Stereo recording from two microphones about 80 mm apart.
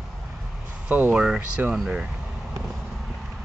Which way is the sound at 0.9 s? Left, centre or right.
Right.